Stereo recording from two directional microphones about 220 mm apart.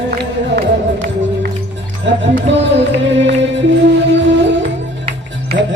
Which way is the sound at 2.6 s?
55° right (ahead or behind).